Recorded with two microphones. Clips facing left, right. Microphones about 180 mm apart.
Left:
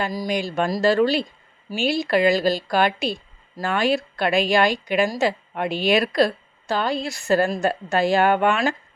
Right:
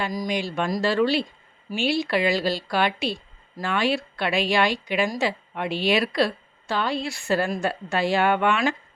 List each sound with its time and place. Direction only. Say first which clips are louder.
0.1 s a woman's voice: left 2 dB; 35° left (ahead or behind)